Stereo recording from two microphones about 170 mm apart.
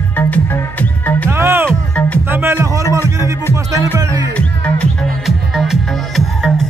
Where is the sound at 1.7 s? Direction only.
5° left (ahead or behind).